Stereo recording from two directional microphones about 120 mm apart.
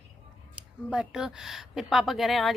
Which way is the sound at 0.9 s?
5° right (ahead or behind).